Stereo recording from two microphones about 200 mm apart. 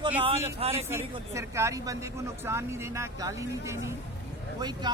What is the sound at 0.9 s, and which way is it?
Speech, 15° right (ahead or behind).